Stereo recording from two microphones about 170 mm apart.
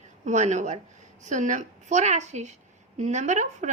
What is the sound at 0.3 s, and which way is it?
A woman's voice, 45° right (ahead or behind).